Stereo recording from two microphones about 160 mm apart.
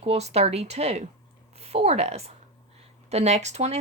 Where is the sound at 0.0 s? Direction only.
40° right (ahead or behind).